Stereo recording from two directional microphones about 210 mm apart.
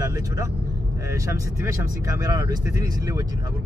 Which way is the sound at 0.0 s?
15° right (ahead or behind).